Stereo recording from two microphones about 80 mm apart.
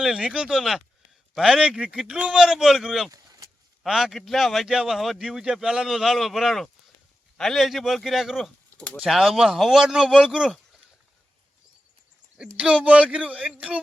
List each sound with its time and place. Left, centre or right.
0.0 s speech: centre
3.1 s vehicle: right
3.8 s speech: centre
12.4 s speech: centre